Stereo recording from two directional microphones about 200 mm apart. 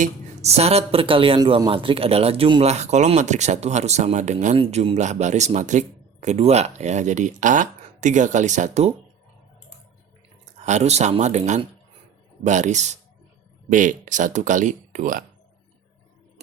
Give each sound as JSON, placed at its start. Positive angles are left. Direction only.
{"t": 0.0, "sound": "speech", "side_deg": -30}
{"t": 10.7, "sound": "speech", "side_deg": -35}